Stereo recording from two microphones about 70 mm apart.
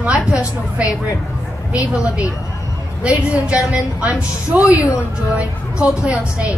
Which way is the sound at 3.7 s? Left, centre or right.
Right.